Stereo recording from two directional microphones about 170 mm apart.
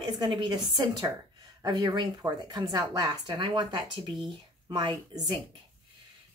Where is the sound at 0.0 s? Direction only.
25° right (ahead or behind).